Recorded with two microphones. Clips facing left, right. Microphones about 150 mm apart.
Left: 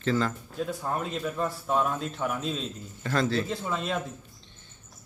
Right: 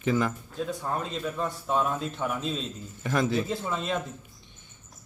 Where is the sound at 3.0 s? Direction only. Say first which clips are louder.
Right 1 dB; 15° right (ahead or behind).